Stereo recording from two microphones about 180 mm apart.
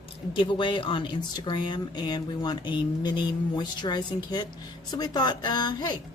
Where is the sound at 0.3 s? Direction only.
25° left (ahead or behind).